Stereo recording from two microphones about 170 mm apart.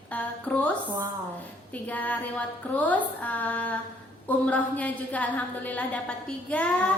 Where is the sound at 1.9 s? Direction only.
10° left (ahead or behind).